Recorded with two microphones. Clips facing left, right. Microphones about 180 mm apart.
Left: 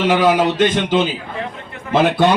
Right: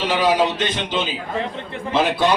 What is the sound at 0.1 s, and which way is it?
A man's voice, 50° left (ahead or behind).